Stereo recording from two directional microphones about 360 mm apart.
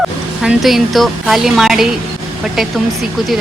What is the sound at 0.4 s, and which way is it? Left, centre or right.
Speech, centre.